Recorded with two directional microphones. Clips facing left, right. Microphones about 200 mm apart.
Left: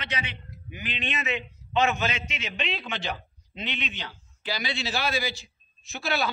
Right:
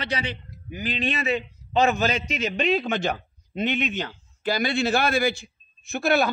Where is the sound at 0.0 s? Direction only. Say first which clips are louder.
Right 6 dB; 35° right (ahead or behind).